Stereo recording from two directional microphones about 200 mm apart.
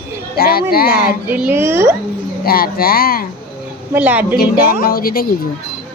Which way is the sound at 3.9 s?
10° right (ahead or behind).